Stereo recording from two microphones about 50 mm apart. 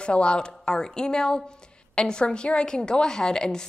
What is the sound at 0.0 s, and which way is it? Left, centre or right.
A woman's voice, left.